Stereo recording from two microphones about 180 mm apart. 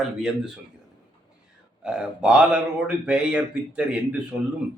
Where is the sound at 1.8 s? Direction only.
5° right (ahead or behind).